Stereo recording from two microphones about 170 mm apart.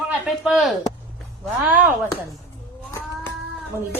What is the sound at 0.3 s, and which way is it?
Speech, centre (ahead or behind).